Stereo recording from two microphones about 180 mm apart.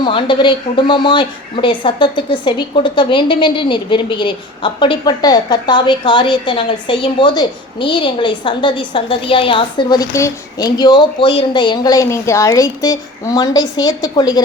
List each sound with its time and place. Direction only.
0.0 s a woman's voice: 25° left (ahead or behind)